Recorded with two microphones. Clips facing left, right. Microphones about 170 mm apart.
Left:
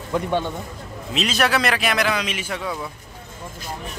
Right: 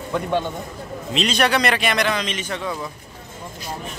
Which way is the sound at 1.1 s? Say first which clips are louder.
Right 1 dB; 5° left (ahead or behind).